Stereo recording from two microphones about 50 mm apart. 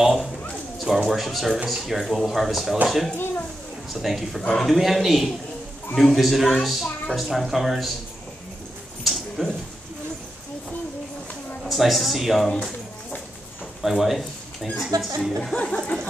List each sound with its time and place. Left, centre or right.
0.0 s a sound: centre
0.7 s a woman's voice: centre
3.9 s a woman's voice: centre
4.4 s speech: centre
4.6 s a woman's voice: centre
9.0 s a sound: centre
11.6 s speech: centre
13.8 s a woman's voice: centre
15.5 s speech: left
15.8 s a sound: centre